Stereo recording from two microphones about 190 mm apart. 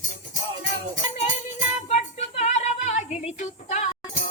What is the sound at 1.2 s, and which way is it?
Music, 35° left (ahead or behind).